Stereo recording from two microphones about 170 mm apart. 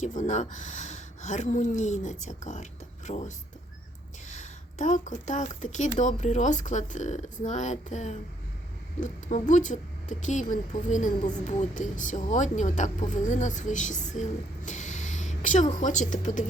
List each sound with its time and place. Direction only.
0.0 s speech: 45° left (ahead or behind)